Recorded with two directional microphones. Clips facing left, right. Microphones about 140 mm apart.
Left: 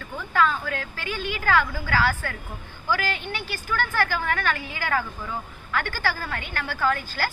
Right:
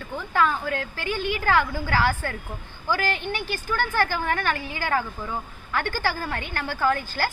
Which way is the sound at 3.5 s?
20° right (ahead or behind).